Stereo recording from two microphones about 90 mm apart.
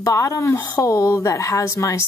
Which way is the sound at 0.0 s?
35° left (ahead or behind).